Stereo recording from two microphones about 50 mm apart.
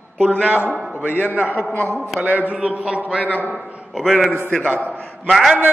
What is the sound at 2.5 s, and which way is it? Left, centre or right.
Speech, right.